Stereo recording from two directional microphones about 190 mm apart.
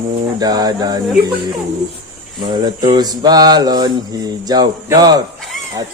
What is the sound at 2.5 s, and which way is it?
Speech, 20° right (ahead or behind).